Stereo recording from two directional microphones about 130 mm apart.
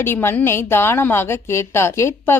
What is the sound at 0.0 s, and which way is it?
A woman's voice, 20° left (ahead or behind).